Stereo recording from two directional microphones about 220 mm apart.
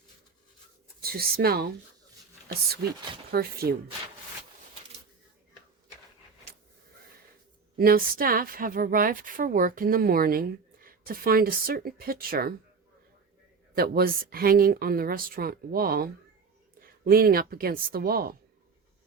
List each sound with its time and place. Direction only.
1.0 s speech: 45° right (ahead or behind)
3.3 s speech: 45° right (ahead or behind)
7.8 s a woman's voice: 40° right (ahead or behind)
13.7 s a woman's voice: 45° right (ahead or behind)